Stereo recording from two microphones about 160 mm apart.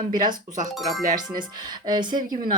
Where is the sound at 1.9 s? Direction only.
25° right (ahead or behind).